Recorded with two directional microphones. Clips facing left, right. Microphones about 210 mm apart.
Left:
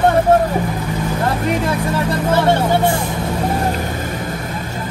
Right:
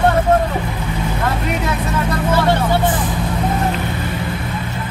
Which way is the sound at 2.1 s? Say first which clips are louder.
Left 1 dB; 25° left (ahead or behind).